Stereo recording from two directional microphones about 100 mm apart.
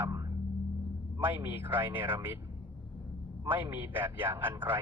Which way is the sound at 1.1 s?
20° right (ahead or behind).